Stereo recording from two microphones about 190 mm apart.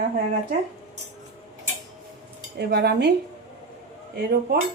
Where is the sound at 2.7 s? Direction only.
55° right (ahead or behind).